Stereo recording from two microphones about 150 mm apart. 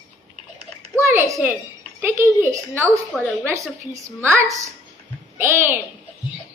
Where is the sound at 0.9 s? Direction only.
20° right (ahead or behind).